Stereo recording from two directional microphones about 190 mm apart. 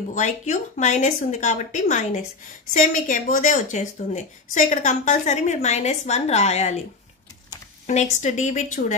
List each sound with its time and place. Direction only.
0.1 s a woman's voice: 40° left (ahead or behind)
7.8 s a woman's voice: 35° left (ahead or behind)